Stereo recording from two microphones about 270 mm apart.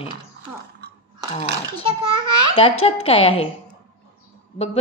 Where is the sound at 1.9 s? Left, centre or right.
Left.